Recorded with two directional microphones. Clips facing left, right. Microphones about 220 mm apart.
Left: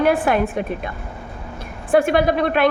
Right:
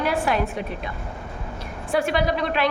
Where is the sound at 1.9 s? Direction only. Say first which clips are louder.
Left 6 dB; 50° left (ahead or behind).